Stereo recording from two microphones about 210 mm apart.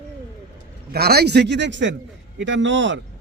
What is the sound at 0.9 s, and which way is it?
A man's voice, 50° right (ahead or behind).